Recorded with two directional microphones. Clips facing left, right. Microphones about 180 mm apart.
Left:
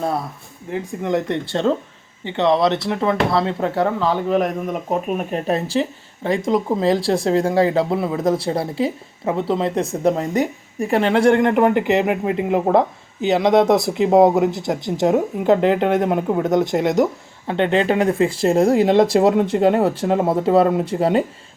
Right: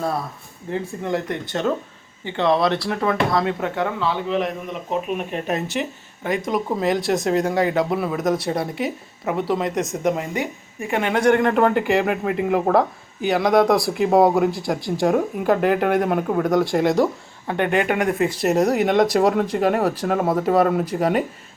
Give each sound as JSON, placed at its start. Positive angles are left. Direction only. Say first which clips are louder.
{"t": 0.7, "sound": "speech", "louder": "left 3 dB", "side_deg": 20}